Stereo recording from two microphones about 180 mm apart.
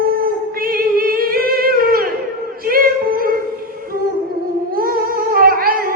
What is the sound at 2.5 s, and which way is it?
Music, 55° right (ahead or behind).